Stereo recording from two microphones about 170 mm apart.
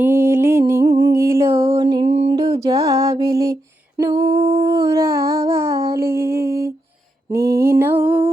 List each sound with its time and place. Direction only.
0.0 s music: 15° right (ahead or behind)
0.7 s humming: 20° right (ahead or behind)
2.0 s a sound: 40° right (ahead or behind)
2.3 s music: 20° right (ahead or behind)
4.4 s humming: 35° right (ahead or behind)
4.6 s a sound: 20° right (ahead or behind)